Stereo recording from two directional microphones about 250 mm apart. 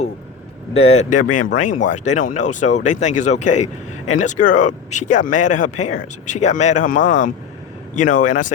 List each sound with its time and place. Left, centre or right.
0.7 s speech: left